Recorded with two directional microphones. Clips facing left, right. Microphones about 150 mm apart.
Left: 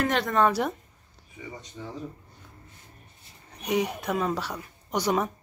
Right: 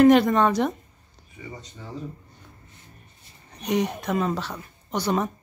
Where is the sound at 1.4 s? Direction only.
5° left (ahead or behind).